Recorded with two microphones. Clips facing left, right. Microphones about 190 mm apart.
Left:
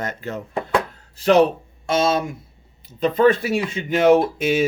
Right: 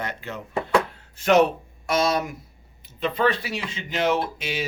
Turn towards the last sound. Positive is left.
turn(degrees=50)  # may be behind; listen again after turning